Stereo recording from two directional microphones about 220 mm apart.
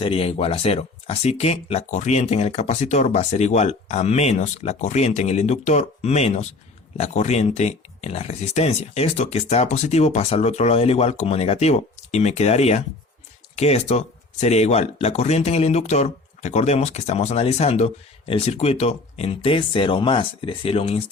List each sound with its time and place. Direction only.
0.0 s speech: 25° left (ahead or behind)